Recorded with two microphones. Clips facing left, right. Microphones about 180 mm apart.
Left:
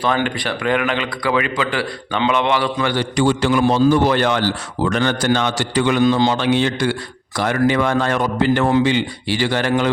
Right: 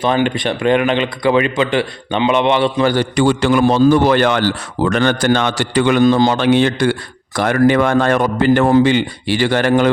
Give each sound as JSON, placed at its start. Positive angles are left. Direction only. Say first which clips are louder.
{"t": 0.0, "sound": "speech", "louder": "right 4 dB", "side_deg": -20}
{"t": 2.8, "sound": "a man's voice", "louder": "right 3 dB", "side_deg": -45}